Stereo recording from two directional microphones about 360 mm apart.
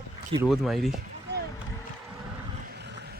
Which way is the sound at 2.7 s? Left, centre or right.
Right.